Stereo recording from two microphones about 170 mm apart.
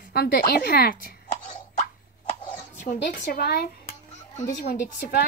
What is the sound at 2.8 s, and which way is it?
Speech, 60° left (ahead or behind).